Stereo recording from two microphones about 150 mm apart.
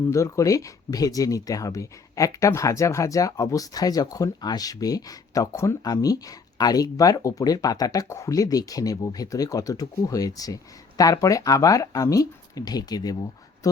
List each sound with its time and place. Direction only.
0.1 s speech: 20° left (ahead or behind)